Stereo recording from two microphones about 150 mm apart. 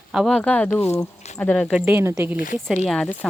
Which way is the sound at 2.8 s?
5° left (ahead or behind).